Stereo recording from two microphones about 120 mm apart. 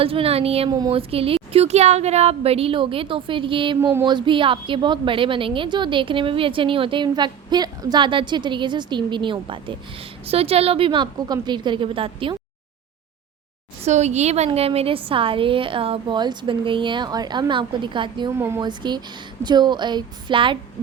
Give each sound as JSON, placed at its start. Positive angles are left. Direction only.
{"t": 0.0, "sound": "a woman's voice", "side_deg": -50}
{"t": 3.8, "sound": "speech", "side_deg": -20}
{"t": 4.0, "sound": "a woman's voice", "side_deg": -40}
{"t": 10.2, "sound": "a woman's voice", "side_deg": -55}
{"t": 13.8, "sound": "a woman's voice", "side_deg": -70}
{"t": 18.3, "sound": "speech", "side_deg": -20}
{"t": 18.6, "sound": "a woman's voice", "side_deg": -40}